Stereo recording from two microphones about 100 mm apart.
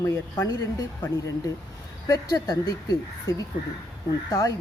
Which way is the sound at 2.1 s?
35° left (ahead or behind).